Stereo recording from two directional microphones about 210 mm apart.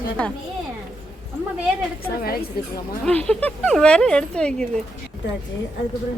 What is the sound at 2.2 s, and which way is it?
Speech, 45° left (ahead or behind).